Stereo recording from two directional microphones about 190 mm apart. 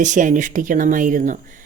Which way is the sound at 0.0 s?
40° right (ahead or behind).